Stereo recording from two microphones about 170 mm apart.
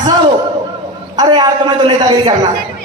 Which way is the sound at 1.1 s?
25° right (ahead or behind).